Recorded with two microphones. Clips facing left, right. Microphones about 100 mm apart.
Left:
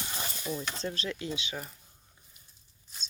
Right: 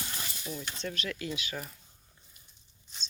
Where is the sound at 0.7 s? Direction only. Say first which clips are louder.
Left 2 dB; 30° left (ahead or behind).